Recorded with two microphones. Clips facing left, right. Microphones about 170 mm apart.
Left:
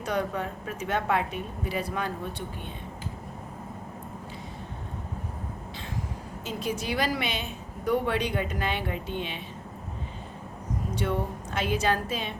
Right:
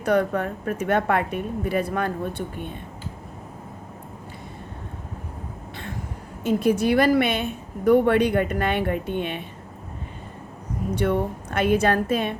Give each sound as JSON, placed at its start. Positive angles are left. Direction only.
{"t": 0.0, "sound": "a woman's voice", "side_deg": -60}
{"t": 6.4, "sound": "a woman's voice", "side_deg": -60}
{"t": 10.9, "sound": "a woman's voice", "side_deg": -60}